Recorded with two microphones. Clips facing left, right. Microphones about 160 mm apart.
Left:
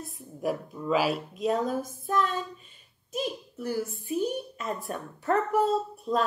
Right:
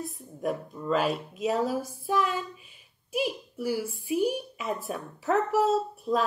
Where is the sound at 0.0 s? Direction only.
Centre (ahead or behind).